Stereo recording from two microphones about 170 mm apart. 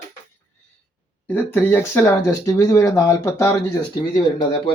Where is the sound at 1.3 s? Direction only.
10° left (ahead or behind).